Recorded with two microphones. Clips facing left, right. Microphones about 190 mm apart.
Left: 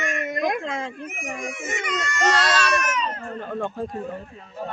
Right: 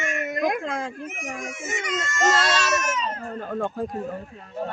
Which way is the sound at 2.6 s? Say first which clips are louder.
Left 1 dB; 25° right (ahead or behind).